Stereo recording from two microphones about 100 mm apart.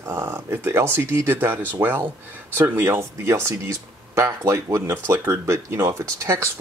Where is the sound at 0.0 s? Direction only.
25° right (ahead or behind).